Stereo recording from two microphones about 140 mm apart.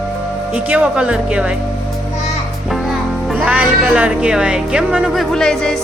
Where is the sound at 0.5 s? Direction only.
10° right (ahead or behind).